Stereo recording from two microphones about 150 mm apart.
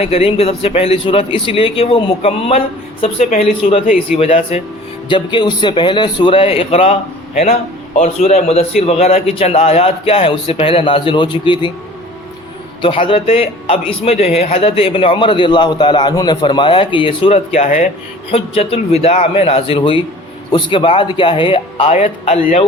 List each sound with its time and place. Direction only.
0.0 s a man's voice: 40° left (ahead or behind)
12.8 s a man's voice: 35° left (ahead or behind)